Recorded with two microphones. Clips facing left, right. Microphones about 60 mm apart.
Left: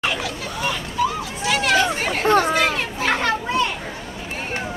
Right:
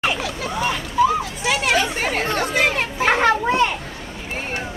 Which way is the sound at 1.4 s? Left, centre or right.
Right.